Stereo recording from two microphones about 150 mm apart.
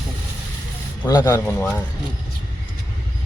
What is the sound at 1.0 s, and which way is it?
Speech, 25° left (ahead or behind).